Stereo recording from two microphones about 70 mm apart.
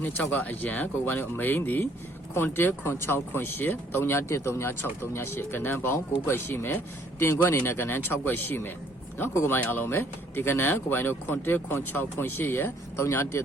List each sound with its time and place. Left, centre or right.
0.0 s speech: left